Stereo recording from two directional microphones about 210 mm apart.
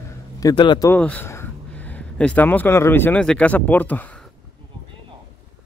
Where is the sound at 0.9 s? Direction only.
5° left (ahead or behind).